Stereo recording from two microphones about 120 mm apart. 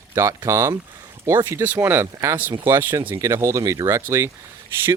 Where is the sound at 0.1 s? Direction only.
30° right (ahead or behind).